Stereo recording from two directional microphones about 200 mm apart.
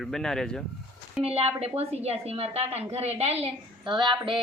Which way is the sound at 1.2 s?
30° right (ahead or behind).